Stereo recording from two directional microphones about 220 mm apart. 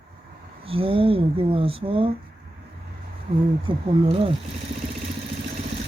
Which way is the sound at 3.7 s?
25° right (ahead or behind).